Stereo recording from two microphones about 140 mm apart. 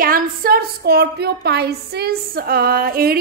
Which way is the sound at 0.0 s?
90° right.